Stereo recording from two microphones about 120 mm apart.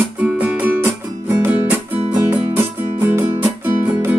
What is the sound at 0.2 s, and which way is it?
Music, 10° right (ahead or behind).